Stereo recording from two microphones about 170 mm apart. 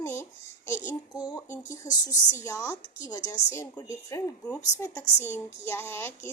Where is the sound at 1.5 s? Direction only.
20° left (ahead or behind).